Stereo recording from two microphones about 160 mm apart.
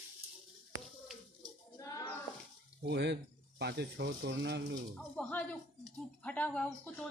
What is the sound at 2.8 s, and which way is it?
Speech, 90° right.